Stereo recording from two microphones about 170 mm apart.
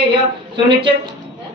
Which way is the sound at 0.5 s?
30° right (ahead or behind).